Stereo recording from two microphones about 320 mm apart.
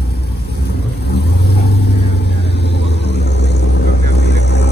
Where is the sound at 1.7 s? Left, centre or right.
Left.